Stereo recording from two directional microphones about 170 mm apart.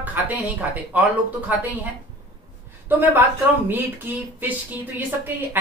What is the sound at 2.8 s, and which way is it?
Speech, 10° right (ahead or behind).